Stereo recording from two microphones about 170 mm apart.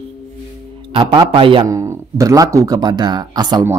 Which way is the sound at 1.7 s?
20° right (ahead or behind).